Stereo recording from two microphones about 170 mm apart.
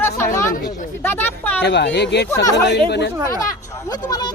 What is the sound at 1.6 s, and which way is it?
Speech, 85° left.